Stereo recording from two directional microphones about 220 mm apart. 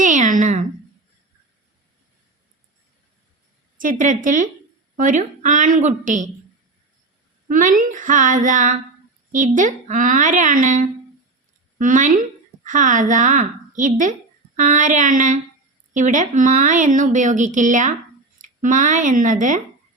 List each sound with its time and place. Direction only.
0.0 s a sound: 35° right (ahead or behind)
3.8 s a woman's voice: 35° right (ahead or behind)
7.4 s a woman's voice: 35° right (ahead or behind)